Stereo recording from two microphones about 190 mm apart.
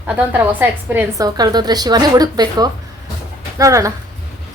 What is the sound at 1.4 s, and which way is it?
A woman's voice, 20° right (ahead or behind).